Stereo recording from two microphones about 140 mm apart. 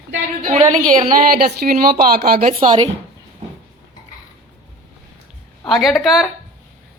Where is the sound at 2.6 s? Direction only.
40° right (ahead or behind).